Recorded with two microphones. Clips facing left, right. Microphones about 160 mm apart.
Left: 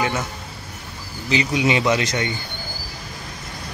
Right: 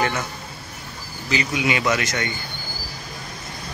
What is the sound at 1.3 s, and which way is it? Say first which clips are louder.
Speech: left 3 dB; 25° left (ahead or behind).